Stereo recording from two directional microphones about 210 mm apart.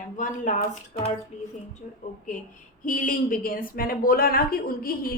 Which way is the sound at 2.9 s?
40° left (ahead or behind).